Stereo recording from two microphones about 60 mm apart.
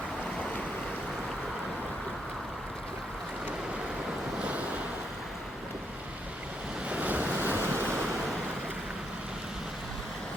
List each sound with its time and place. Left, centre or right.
4.4 s waves: right
6.9 s waves: right